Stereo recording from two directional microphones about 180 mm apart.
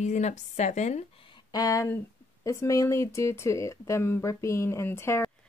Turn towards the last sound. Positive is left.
turn(degrees=15)  # may be behind; listen again after turning